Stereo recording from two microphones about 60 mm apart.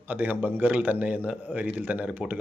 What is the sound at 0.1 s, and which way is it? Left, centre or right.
Speech, right.